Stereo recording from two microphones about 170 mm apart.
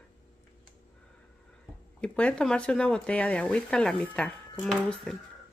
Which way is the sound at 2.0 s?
5° left (ahead or behind).